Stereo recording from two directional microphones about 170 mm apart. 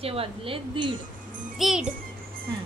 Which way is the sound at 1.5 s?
5° right (ahead or behind).